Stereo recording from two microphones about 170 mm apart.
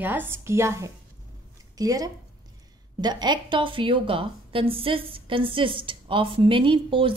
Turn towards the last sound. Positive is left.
turn(degrees=-30)  # may be behind; listen again after turning